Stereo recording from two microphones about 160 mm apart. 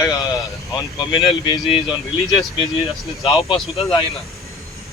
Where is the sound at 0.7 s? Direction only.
30° left (ahead or behind).